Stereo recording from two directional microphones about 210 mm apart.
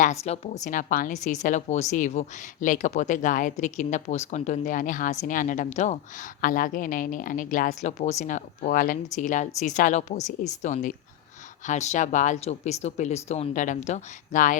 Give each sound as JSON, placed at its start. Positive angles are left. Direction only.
{"t": 0.3, "sound": "a woman's voice", "side_deg": 35}